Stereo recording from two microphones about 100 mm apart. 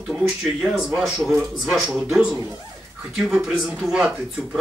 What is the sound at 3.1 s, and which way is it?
Speech, 5° right (ahead or behind).